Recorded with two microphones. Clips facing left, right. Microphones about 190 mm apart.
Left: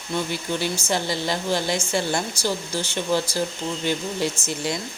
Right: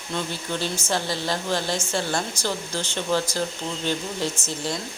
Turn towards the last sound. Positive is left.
turn(degrees=15)  # may be behind; listen again after turning